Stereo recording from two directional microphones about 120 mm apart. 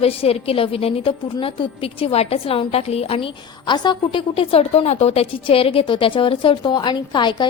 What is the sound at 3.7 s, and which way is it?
A woman's voice, 40° left (ahead or behind).